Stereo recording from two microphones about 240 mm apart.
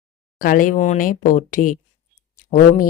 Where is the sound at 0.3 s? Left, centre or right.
Left.